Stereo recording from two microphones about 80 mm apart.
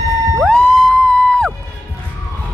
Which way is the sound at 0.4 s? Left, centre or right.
Centre.